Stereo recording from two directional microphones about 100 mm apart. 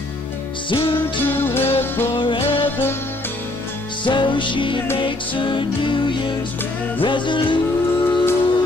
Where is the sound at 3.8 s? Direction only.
50° left (ahead or behind).